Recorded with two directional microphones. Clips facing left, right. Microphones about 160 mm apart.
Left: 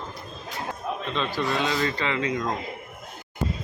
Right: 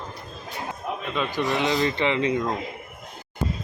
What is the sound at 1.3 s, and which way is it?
Speech, 15° right (ahead or behind).